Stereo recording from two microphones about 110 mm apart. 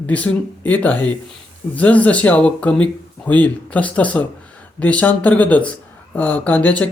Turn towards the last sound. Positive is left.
turn(degrees=15)  # may be behind; listen again after turning